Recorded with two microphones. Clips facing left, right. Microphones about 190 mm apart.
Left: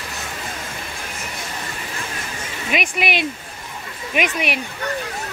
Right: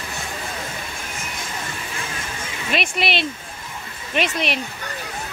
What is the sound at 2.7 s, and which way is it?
Speech, 10° left (ahead or behind).